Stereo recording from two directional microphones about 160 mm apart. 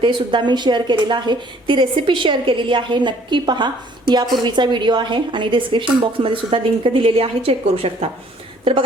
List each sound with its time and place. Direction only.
0.0 s a woman's voice: 30° right (ahead or behind)